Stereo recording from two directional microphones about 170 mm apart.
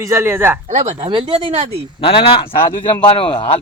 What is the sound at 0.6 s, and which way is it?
Speech, 35° right (ahead or behind).